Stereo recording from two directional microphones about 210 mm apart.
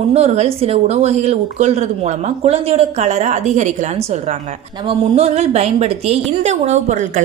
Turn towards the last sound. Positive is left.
turn(degrees=-35)  # may be behind; listen again after turning